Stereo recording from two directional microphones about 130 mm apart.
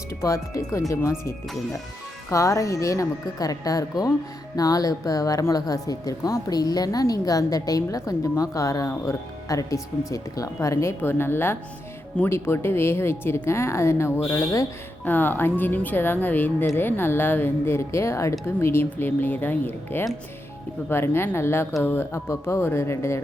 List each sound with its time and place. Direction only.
0.2 s speech: 25° left (ahead or behind)
2.3 s speech: 25° left (ahead or behind)